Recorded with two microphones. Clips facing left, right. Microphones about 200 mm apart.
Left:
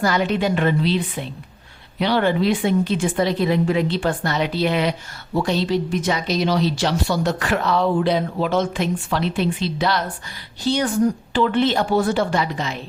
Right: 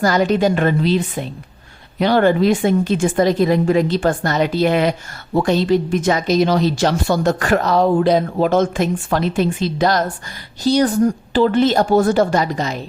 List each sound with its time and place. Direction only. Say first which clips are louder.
0.0 s a woman's voice: right 5 dB; 40° right (ahead or behind)